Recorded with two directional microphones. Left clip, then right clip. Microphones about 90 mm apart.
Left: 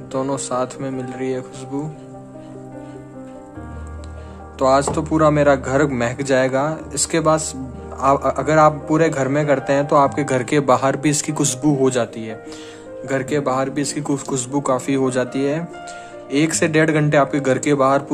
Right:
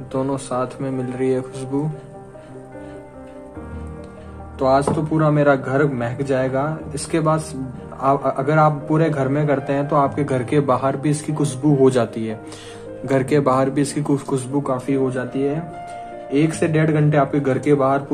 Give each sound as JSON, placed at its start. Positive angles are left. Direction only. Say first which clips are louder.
{"t": 0.1, "sound": "speech", "louder": "left 1 dB", "side_deg": 40}
{"t": 0.9, "sound": "speech", "louder": "right 6 dB", "side_deg": 20}
{"t": 4.6, "sound": "a man's voice", "louder": "left 1 dB", "side_deg": 60}
{"t": 5.4, "sound": "speech", "louder": "left 1 dB", "side_deg": 50}
{"t": 5.8, "sound": "speech", "louder": "left 1 dB", "side_deg": 90}
{"t": 6.9, "sound": "a man's voice", "louder": "left 4 dB", "side_deg": 50}
{"t": 11.8, "sound": "speech", "louder": "right 2 dB", "side_deg": 20}
{"t": 13.0, "sound": "speech", "louder": "right 3 dB", "side_deg": 5}
{"t": 13.7, "sound": "speech", "louder": "right 2 dB", "side_deg": 25}
{"t": 14.5, "sound": "a man's voice", "louder": "left 4 dB", "side_deg": 65}
{"t": 15.3, "sound": "speech", "louder": "left 1 dB", "side_deg": 90}
{"t": 16.3, "sound": "speech", "louder": "left 1 dB", "side_deg": 65}